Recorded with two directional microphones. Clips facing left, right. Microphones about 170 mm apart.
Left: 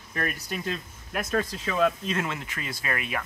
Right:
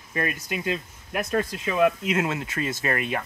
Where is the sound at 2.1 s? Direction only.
20° right (ahead or behind).